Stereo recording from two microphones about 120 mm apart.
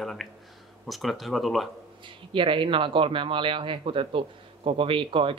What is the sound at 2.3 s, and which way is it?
Speech, 45° right (ahead or behind).